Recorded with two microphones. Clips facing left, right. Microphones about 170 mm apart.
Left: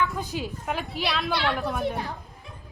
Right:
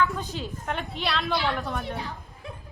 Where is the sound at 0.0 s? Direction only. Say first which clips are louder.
Right 1 dB; 10° left (ahead or behind).